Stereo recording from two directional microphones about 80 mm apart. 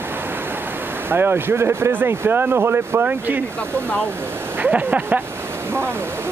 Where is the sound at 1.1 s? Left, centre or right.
Right.